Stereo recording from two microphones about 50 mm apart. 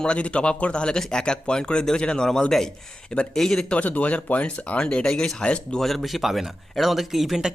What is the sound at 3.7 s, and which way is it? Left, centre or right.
Speech, left.